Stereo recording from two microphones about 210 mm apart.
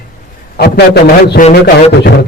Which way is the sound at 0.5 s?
45° left (ahead or behind).